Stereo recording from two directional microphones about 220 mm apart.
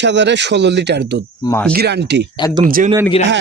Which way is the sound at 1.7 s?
50° right (ahead or behind).